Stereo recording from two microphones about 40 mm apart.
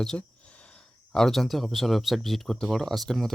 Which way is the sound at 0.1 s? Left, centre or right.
Left.